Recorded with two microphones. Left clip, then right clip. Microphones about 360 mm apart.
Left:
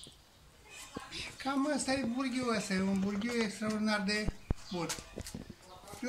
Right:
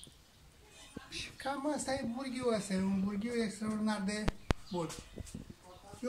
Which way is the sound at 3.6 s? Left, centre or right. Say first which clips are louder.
Left 4 dB; right.